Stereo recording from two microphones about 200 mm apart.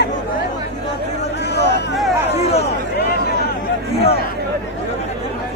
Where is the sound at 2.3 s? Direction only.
30° left (ahead or behind).